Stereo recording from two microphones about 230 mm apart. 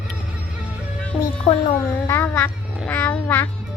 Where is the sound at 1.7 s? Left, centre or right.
Centre.